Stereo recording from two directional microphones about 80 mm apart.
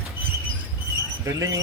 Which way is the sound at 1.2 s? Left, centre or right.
Right.